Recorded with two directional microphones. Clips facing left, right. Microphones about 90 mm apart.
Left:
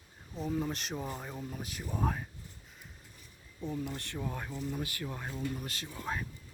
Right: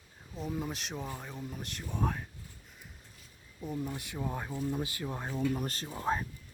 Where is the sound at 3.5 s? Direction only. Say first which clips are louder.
Even; 5° right (ahead or behind).